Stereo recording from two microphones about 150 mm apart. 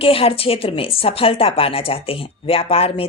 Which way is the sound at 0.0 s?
40° left (ahead or behind).